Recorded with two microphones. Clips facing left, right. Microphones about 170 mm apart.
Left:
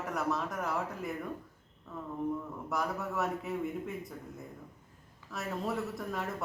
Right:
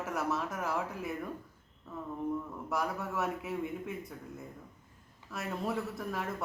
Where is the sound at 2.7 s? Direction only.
Centre (ahead or behind).